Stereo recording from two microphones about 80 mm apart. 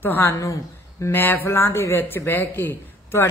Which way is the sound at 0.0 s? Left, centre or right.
Left.